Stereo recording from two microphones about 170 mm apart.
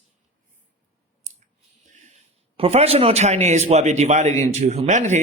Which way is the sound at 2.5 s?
35° right (ahead or behind).